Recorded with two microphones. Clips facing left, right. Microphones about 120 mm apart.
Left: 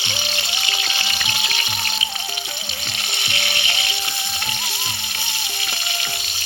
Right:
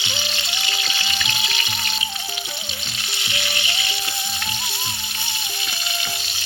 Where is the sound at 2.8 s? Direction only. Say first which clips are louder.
Left 2 dB; 65° left (ahead or behind).